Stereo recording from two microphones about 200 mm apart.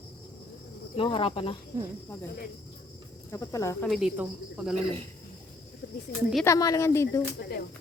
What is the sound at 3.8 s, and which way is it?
Speech, centre (ahead or behind).